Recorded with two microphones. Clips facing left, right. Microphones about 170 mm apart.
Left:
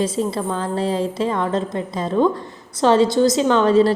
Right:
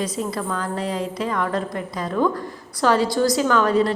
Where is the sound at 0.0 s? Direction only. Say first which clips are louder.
Left 4 dB; 25° left (ahead or behind).